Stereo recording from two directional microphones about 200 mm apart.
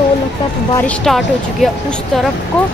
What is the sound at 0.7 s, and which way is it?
Speech, 5° left (ahead or behind).